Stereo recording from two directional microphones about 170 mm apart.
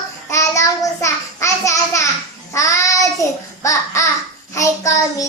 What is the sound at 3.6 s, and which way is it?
Babbling, 20° left (ahead or behind).